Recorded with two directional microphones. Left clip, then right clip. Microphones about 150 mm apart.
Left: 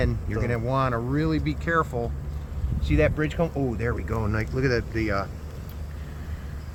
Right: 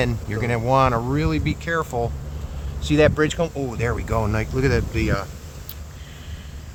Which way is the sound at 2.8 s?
80° right.